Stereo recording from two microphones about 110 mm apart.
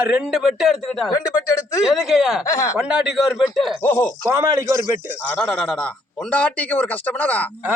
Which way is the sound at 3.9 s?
20° left (ahead or behind).